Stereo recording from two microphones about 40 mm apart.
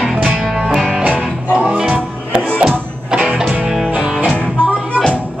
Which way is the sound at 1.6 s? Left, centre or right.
Right.